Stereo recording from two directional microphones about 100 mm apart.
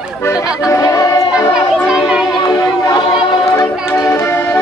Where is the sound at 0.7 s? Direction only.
35° left (ahead or behind).